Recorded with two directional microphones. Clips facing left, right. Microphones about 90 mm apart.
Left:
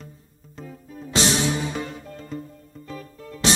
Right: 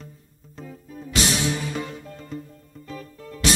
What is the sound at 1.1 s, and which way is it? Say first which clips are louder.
Music: left 2 dB; 30° left (ahead or behind).